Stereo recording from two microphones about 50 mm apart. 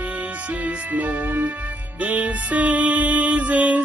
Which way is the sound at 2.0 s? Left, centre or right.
Right.